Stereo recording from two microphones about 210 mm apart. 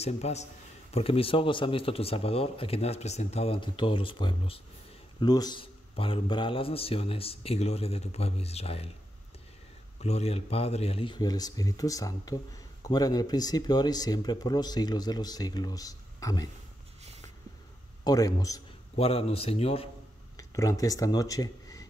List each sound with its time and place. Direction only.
0.0 s a man's voice: 30° left (ahead or behind)
9.9 s speech: 30° left (ahead or behind)
18.0 s a man's voice: 15° left (ahead or behind)
18.9 s speech: 30° left (ahead or behind)
20.3 s speech: 15° left (ahead or behind)